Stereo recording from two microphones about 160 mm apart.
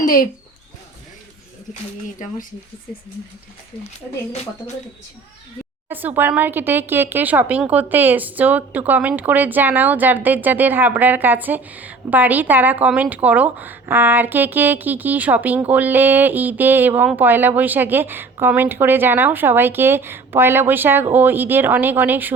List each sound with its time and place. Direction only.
0.0 s a sound: 60° left (ahead or behind)
2.2 s speech: 50° left (ahead or behind)
5.9 s speech: 10° right (ahead or behind)